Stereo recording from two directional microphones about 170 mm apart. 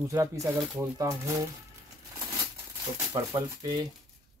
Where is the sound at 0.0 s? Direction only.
15° right (ahead or behind).